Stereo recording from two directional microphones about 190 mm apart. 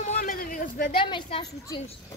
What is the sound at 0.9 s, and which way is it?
Speech, 25° left (ahead or behind).